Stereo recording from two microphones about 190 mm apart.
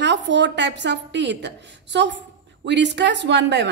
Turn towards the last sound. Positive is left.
turn(degrees=-65)  # may be behind; listen again after turning